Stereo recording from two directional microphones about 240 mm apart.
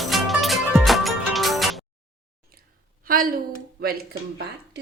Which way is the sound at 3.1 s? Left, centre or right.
Right.